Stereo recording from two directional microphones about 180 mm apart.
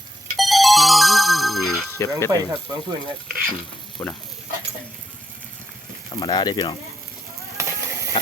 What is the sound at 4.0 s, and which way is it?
Speech, 10° left (ahead or behind).